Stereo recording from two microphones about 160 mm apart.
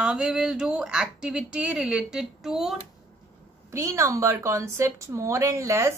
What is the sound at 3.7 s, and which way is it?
A woman's voice, 20° right (ahead or behind).